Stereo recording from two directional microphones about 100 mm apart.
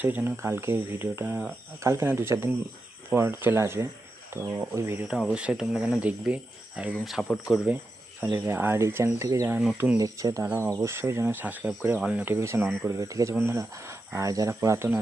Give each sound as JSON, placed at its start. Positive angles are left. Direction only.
{"t": 0.0, "sound": "speech", "side_deg": -15}
{"t": 5.0, "sound": "speech", "side_deg": -5}
{"t": 8.2, "sound": "speech", "side_deg": -20}
{"t": 9.7, "sound": "speech", "side_deg": -15}
{"t": 10.0, "sound": "speech", "side_deg": -35}
{"t": 10.4, "sound": "speech", "side_deg": -25}
{"t": 12.3, "sound": "speech", "side_deg": -25}